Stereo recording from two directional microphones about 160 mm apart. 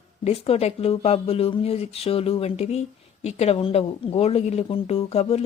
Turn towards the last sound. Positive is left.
turn(degrees=40)  # may be behind; listen again after turning